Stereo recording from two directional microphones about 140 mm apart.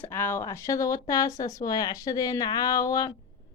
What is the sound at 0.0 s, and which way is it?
Speech, 15° left (ahead or behind).